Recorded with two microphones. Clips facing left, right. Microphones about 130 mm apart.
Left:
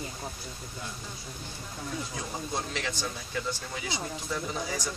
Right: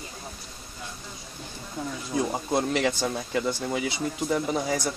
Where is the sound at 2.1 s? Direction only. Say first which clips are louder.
Right 14 dB; 65° right (ahead or behind).